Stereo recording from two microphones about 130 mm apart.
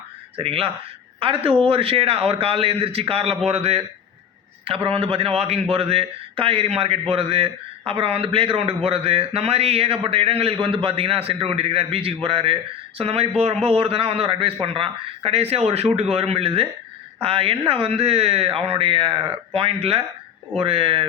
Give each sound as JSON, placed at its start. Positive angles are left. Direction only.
{"t": 0.3, "sound": "a man's voice", "side_deg": -45}